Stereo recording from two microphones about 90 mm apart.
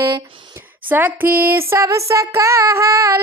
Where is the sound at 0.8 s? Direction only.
20° right (ahead or behind).